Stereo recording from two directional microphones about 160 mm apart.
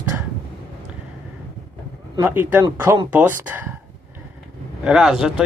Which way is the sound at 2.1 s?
15° right (ahead or behind).